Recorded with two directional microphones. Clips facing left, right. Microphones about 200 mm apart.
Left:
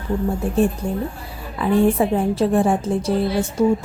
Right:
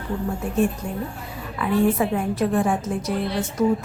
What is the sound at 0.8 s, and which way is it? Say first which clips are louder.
A woman's voice: left 5 dB; 30° left (ahead or behind).